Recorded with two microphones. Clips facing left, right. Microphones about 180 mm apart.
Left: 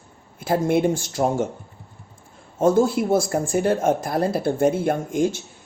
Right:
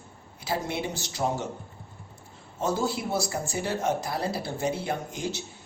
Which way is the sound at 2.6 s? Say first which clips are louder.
Left 10 dB; 50° left (ahead or behind).